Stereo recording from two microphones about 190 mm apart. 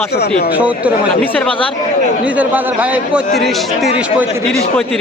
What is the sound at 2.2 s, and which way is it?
A man's voice, 10° right (ahead or behind).